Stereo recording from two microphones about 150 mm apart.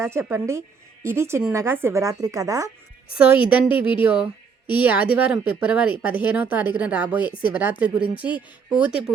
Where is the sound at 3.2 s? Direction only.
10° right (ahead or behind).